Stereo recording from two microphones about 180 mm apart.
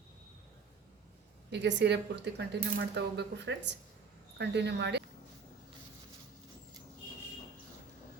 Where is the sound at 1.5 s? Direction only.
75° right (ahead or behind).